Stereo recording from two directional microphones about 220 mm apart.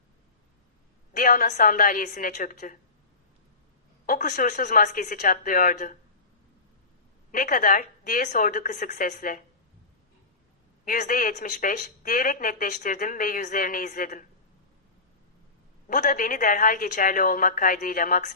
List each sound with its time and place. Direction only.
1.1 s speech: 40° left (ahead or behind)
4.0 s speech: 40° left (ahead or behind)
7.3 s speech: 35° left (ahead or behind)
10.8 s speech: 35° left (ahead or behind)
15.9 s speech: 35° left (ahead or behind)